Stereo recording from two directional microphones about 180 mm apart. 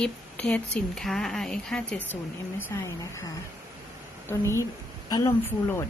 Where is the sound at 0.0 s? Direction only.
5° left (ahead or behind).